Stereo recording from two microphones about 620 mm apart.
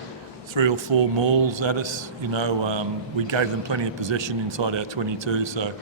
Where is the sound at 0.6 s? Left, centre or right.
Right.